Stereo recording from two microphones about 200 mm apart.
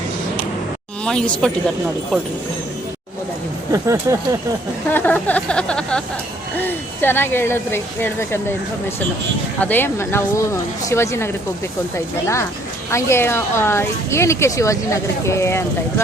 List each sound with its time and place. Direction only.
1.0 s speech: 5° left (ahead or behind)
3.7 s speech: 15° right (ahead or behind)
4.9 s speech: 10° left (ahead or behind)
9.6 s speech: 10° left (ahead or behind)